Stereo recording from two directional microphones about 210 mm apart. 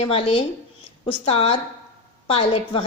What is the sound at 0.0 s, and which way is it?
A woman's voice, 25° left (ahead or behind).